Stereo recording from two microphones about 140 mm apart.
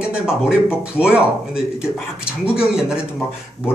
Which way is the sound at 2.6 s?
5° right (ahead or behind).